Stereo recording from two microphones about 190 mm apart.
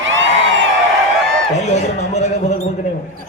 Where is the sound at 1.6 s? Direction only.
35° left (ahead or behind).